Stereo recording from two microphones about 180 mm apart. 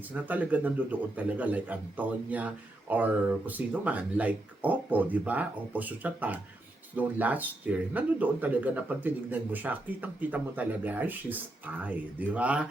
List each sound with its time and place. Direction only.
0.1 s a man's voice: 10° right (ahead or behind)